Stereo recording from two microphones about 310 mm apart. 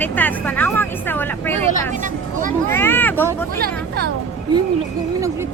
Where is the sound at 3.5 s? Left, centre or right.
Right.